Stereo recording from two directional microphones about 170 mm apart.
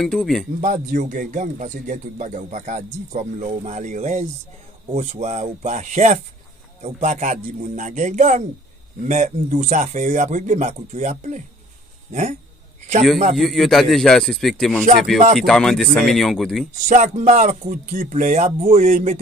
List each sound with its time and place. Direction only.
0.0 s a man's voice: 5° left (ahead or behind)
0.6 s a man's voice: 45° right (ahead or behind)
13.4 s a man's voice: centre (ahead or behind)
16.8 s a man's voice: 45° right (ahead or behind)